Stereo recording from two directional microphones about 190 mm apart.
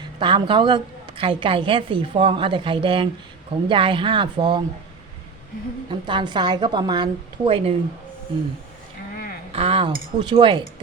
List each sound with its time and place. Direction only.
0.2 s a woman's voice: 25° right (ahead or behind)
5.9 s a woman's voice: 25° right (ahead or behind)
9.5 s a woman's voice: 30° right (ahead or behind)